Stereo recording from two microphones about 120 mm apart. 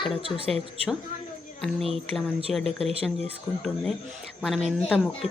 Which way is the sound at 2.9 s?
55° right (ahead or behind).